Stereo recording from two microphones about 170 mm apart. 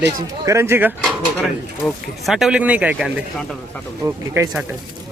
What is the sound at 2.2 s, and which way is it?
Speech, centre (ahead or behind).